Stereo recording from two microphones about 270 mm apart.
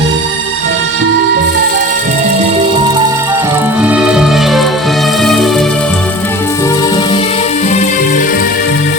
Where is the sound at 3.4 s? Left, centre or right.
Centre; by 8.4 s left.